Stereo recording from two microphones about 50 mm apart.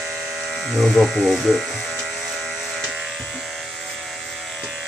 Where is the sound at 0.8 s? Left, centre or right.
Centre.